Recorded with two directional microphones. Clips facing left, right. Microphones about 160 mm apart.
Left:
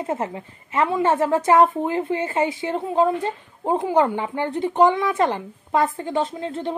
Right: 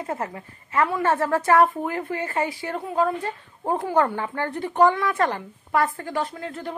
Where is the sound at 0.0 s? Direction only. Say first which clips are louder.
Left 4 dB; 20° left (ahead or behind).